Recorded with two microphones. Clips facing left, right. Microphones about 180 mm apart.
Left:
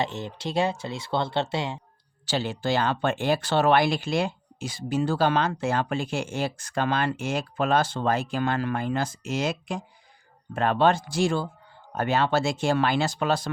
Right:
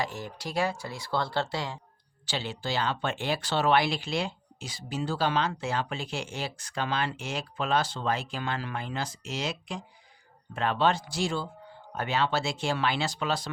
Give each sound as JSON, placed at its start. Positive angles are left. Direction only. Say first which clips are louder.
{"t": 0.0, "sound": "speech", "louder": "left 4 dB", "side_deg": 25}
{"t": 2.2, "sound": "speech", "louder": "left 7 dB", "side_deg": 45}